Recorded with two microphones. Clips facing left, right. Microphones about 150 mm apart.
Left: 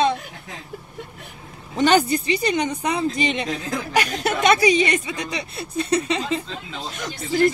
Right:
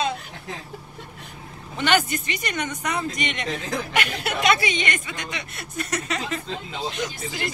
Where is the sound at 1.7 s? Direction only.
35° left (ahead or behind).